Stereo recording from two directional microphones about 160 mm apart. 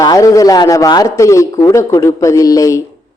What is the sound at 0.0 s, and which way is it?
Speech, 20° left (ahead or behind).